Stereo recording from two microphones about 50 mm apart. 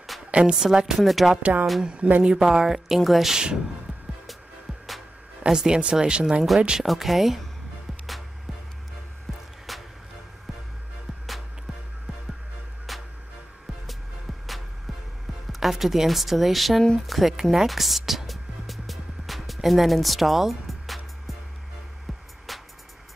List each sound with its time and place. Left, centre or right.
0.3 s a woman's voice: centre
0.6 s speech: centre
1.4 s speech: right
1.8 s speech: right
5.5 s speech: centre
6.8 s speech: centre
9.7 s music: centre
15.6 s speech: centre
17.0 s music: centre
22.5 s music: centre